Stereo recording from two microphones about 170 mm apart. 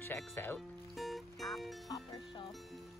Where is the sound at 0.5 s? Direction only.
Centre (ahead or behind).